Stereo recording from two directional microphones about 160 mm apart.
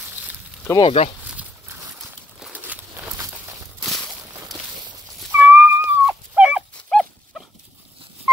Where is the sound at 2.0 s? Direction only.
5° right (ahead or behind).